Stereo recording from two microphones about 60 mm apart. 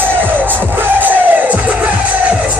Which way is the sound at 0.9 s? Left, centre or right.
Right.